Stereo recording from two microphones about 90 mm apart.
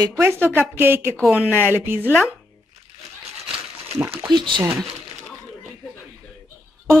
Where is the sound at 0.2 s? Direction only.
25° right (ahead or behind).